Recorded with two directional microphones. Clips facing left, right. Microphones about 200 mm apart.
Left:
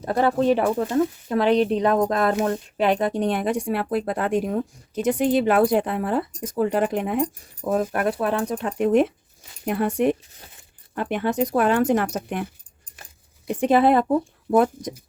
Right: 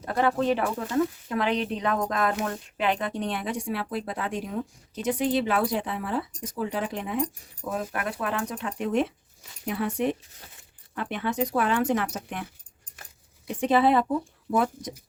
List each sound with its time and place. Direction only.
0.0 s speech: 35° left (ahead or behind); by 7.3 s 55° left (ahead or behind)
7.7 s speech: 40° left (ahead or behind)
8.6 s speech: 50° left (ahead or behind)
13.5 s speech: 45° left (ahead or behind)